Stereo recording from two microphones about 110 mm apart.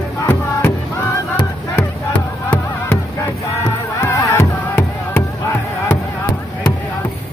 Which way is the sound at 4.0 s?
25° left (ahead or behind).